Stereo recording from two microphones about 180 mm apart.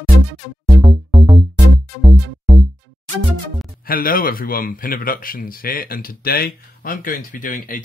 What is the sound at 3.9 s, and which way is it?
Speech, 55° left (ahead or behind).